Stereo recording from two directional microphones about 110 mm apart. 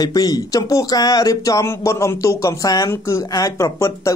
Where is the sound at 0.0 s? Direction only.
35° left (ahead or behind).